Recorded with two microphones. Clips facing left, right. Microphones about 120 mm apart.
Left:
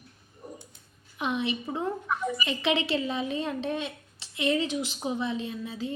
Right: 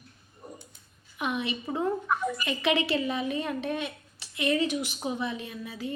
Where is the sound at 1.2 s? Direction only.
25° left (ahead or behind).